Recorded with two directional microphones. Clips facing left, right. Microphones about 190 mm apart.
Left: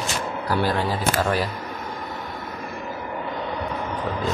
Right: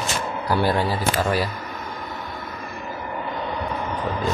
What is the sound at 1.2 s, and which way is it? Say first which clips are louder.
Speech: right 1 dB; 10° right (ahead or behind).